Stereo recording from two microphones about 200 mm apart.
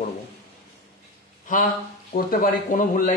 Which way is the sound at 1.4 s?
40° left (ahead or behind).